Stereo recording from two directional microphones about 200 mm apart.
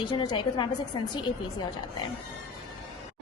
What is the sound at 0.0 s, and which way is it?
Speech, 20° left (ahead or behind).